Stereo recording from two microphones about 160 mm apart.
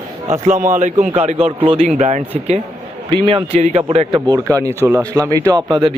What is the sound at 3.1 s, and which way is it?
A man's voice, 35° right (ahead or behind).